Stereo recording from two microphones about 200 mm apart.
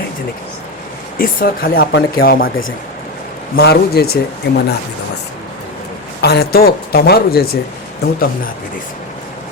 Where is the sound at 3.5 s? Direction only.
50° left (ahead or behind).